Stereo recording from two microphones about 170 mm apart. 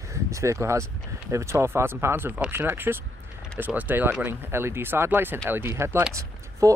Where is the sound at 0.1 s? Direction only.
15° right (ahead or behind).